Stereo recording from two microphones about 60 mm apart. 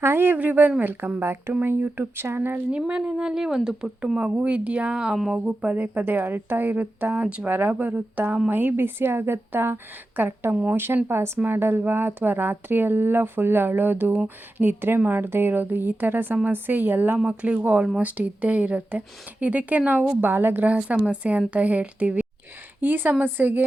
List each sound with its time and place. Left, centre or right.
0.0 s a woman's voice: right
1.2 s a woman's voice: right
2.7 s a woman's voice: centre
5.1 s a sound: centre
5.5 s a woman's voice: right
17.4 s a woman's voice: centre
20.2 s a woman's voice: right
20.7 s a woman's voice: centre